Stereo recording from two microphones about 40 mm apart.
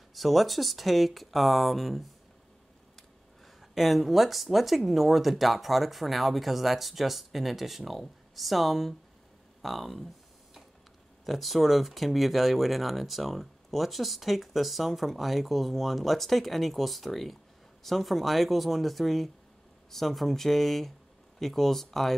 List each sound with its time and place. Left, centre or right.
0.1 s speech: centre
11.2 s speech: centre